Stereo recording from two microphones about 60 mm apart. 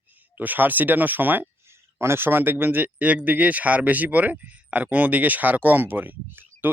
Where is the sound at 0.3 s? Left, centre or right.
Right.